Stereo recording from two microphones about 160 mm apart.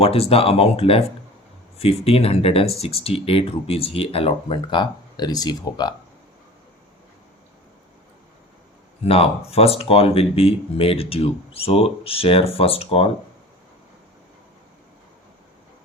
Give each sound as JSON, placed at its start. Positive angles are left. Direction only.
{"t": 0.0, "sound": "speech", "side_deg": 40}
{"t": 9.0, "sound": "speech", "side_deg": 35}